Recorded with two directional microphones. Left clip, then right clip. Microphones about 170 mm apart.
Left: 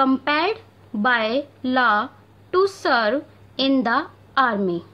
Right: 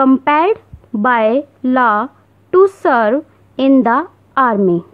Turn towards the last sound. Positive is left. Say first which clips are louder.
# right 7 dB
turn(degrees=-40)  # may be behind; listen again after turning